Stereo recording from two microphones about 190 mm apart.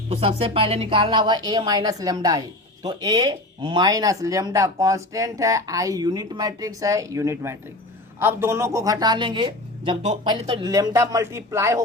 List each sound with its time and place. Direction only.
0.1 s a woman's voice: 30° right (ahead or behind); by 11.8 s 15° right (ahead or behind)